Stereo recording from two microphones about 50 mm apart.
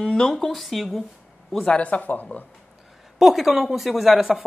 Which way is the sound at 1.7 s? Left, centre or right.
Left.